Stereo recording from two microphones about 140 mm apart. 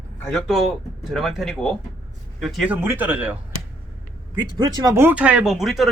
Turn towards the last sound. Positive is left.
turn(degrees=0)  # may be behind; listen again after turning